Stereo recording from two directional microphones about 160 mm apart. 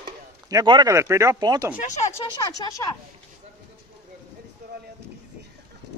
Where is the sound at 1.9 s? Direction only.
25° left (ahead or behind).